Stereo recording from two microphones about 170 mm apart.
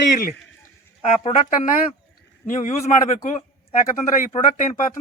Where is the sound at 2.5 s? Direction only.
50° left (ahead or behind).